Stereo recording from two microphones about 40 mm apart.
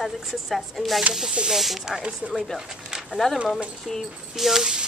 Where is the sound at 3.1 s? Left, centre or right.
Centre.